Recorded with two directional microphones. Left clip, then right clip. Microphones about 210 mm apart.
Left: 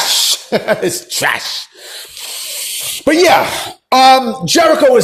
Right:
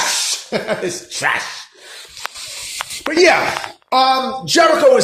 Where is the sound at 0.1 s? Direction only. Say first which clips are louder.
Left 6 dB; 35° left (ahead or behind).